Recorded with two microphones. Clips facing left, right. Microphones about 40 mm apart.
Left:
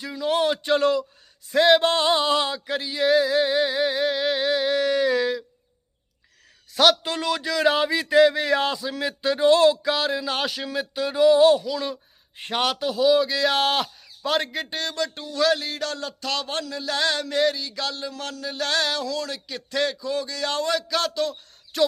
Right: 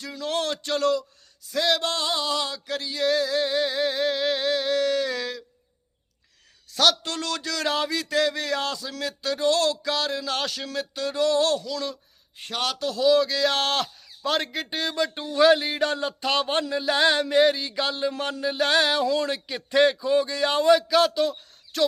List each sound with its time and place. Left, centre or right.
0.0 s a man's voice: centre
6.7 s a man's voice: centre
21.7 s a sound: centre